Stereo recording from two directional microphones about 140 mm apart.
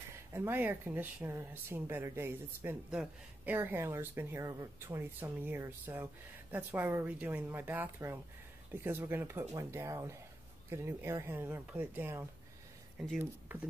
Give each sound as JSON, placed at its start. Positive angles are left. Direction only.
{"t": 0.3, "sound": "speech", "side_deg": -15}